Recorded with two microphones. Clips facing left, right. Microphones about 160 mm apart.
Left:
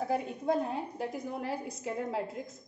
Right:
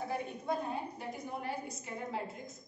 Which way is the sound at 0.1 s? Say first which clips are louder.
Left 7 dB; 90° left.